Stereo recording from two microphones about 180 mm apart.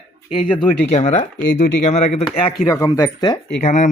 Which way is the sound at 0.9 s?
40° left (ahead or behind).